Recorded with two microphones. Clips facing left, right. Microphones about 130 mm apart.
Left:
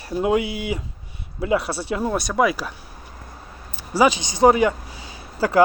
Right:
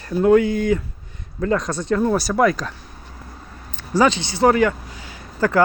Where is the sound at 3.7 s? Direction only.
10° left (ahead or behind).